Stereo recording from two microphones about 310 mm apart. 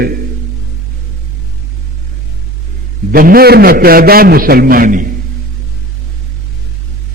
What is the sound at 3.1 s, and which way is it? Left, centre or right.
A man's voice, right.